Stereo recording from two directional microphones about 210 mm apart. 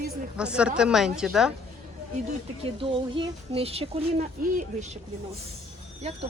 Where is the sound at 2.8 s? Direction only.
25° right (ahead or behind).